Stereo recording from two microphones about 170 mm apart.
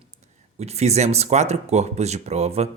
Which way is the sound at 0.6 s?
40° right (ahead or behind).